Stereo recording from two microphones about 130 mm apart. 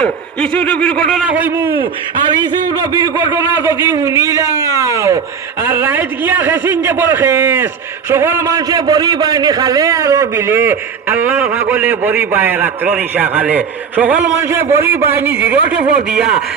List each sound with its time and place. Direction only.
0.0 s a man's voice: 10° left (ahead or behind)
1.2 s a man's voice: 10° right (ahead or behind)